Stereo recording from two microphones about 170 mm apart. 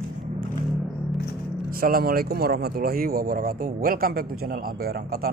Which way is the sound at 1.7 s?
60° right (ahead or behind).